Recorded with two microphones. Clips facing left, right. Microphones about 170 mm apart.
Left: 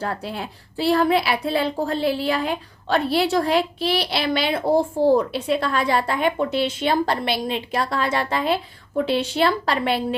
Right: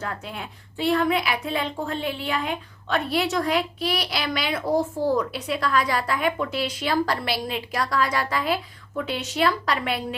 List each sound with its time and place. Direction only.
0.0 s a woman's voice: 35° left (ahead or behind)